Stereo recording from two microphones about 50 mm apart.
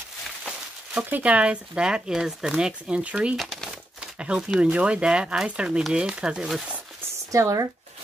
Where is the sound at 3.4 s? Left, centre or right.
Centre.